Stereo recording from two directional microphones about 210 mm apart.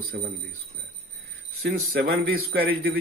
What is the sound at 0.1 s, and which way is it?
Speech, 50° right (ahead or behind).